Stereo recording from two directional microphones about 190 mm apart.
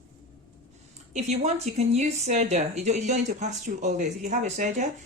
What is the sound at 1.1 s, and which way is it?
A woman's voice, 35° right (ahead or behind).